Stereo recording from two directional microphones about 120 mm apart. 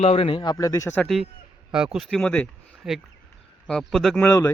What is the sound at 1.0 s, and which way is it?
Speech, centre (ahead or behind).